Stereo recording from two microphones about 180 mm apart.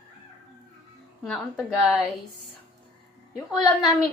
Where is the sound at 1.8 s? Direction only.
Centre (ahead or behind).